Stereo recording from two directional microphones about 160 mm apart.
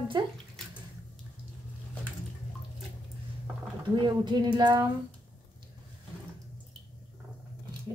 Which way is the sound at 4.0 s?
30° right (ahead or behind).